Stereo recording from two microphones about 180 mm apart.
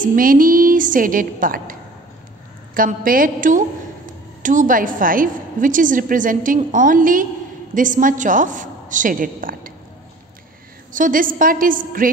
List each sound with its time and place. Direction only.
0.0 s a woman's voice: 50° right (ahead or behind)
10.9 s a woman's voice: 50° right (ahead or behind)